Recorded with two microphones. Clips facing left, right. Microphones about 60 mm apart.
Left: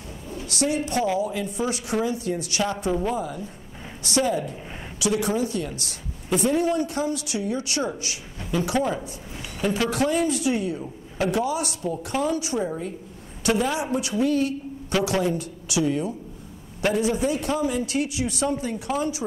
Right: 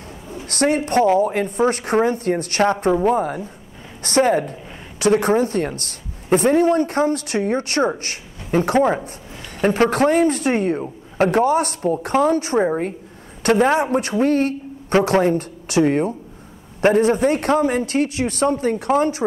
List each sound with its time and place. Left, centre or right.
0.5 s a woman's voice: right